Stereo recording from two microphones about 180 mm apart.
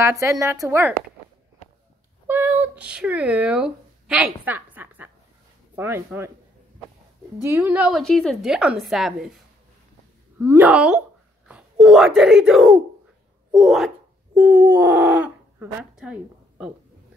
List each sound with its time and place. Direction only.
0.0 s a woman's voice: 15° right (ahead or behind)
2.2 s a woman's voice: 10° right (ahead or behind)
7.4 s a woman's voice: 10° right (ahead or behind)
8.1 s speech: 5° left (ahead or behind)
10.4 s a woman's voice: 10° right (ahead or behind)
13.6 s a sound: centre (ahead or behind)